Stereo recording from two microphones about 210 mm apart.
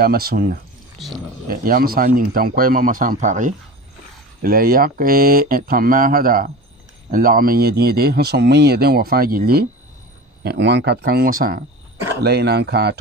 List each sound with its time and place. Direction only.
0.0 s speech: 45° right (ahead or behind)
0.9 s speech: centre (ahead or behind)
1.5 s speech: 45° right (ahead or behind)